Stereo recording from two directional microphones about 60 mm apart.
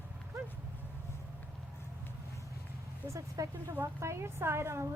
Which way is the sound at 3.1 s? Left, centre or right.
Right.